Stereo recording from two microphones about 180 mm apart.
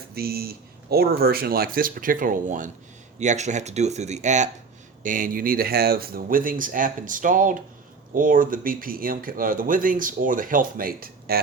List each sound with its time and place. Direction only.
0.1 s speech: 60° right (ahead or behind)